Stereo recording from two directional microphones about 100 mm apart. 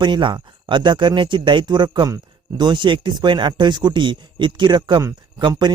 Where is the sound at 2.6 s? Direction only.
50° right (ahead or behind).